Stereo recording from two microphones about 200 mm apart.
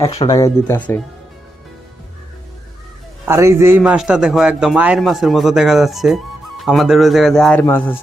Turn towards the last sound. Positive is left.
turn(degrees=10)  # may be behind; listen again after turning